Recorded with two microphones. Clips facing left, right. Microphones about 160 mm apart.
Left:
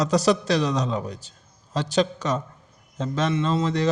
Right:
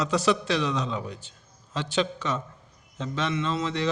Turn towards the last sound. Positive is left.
turn(degrees=40)  # may be behind; listen again after turning